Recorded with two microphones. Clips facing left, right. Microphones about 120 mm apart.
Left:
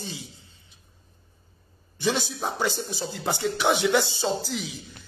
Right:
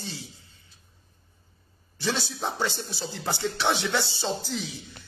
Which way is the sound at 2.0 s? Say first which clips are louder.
Left 3 dB; 15° left (ahead or behind).